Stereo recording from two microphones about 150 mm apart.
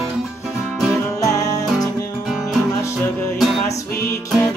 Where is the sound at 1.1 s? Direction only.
20° left (ahead or behind).